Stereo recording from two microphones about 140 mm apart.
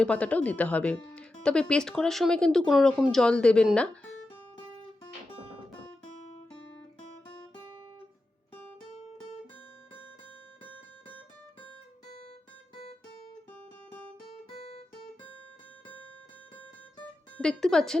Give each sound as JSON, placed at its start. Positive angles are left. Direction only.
{"t": 0.0, "sound": "speech", "side_deg": 10}
{"t": 14.5, "sound": "guitar", "side_deg": 45}
{"t": 17.0, "sound": "music", "side_deg": 10}